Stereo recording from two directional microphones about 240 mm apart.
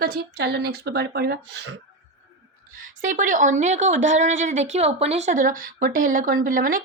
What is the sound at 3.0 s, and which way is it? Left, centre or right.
A woman's voice, right.